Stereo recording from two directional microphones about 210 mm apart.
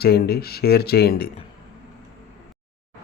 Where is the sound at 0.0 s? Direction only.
50° left (ahead or behind).